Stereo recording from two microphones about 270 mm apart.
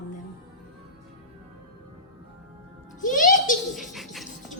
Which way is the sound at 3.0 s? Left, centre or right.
Left.